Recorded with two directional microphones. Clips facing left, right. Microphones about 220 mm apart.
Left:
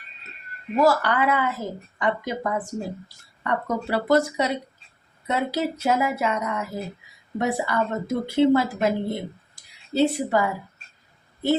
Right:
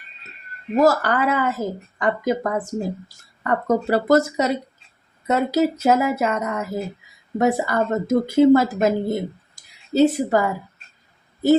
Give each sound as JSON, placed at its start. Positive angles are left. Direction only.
{"t": 0.8, "sound": "speech", "side_deg": -45}